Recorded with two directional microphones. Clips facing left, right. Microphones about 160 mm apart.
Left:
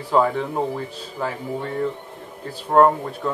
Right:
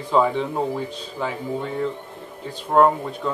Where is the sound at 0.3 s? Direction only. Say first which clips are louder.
Even; 5° left (ahead or behind).